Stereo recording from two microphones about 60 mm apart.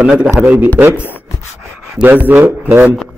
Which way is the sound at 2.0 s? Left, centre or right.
Right.